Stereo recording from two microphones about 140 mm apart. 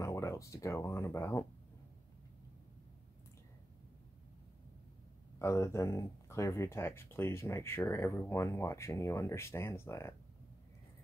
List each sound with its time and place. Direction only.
0.0 s speech: 20° left (ahead or behind)
5.4 s speech: 20° left (ahead or behind)